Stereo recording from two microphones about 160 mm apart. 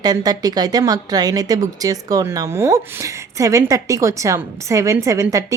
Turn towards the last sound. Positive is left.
turn(degrees=-20)  # may be behind; listen again after turning